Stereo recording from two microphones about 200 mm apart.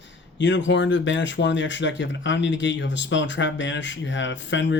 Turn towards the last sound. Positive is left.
turn(degrees=65)  # may be behind; listen again after turning